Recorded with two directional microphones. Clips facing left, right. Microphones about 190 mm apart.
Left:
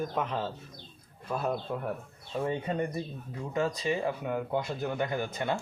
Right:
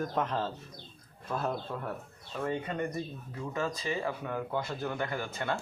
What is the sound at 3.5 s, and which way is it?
Speech, 20° left (ahead or behind).